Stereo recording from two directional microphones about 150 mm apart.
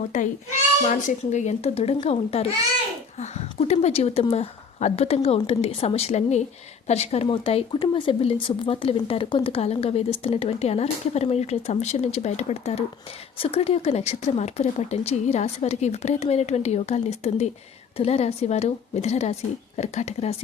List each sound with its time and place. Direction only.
0.1 s a child's voice: 55° left (ahead or behind)